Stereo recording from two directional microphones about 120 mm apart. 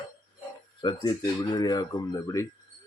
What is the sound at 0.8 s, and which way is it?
Speech, 35° left (ahead or behind).